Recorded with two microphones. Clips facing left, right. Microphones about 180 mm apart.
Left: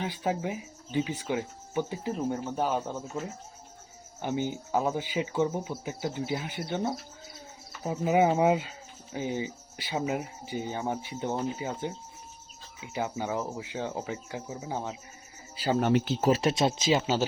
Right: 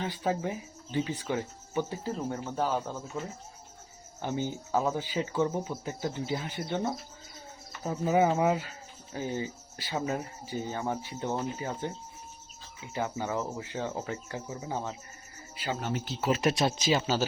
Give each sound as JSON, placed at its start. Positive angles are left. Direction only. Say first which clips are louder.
{"t": 0.0, "sound": "speech", "louder": "even", "side_deg": 15}
{"t": 4.2, "sound": "speech", "louder": "left 2 dB", "side_deg": 15}
{"t": 15.8, "sound": "speech", "louder": "left 9 dB", "side_deg": 70}
{"t": 16.2, "sound": "speech", "louder": "right 1 dB", "side_deg": 30}